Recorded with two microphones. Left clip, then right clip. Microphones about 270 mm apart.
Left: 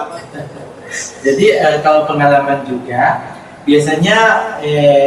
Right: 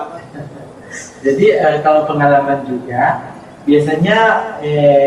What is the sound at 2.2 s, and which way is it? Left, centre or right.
Speech, centre.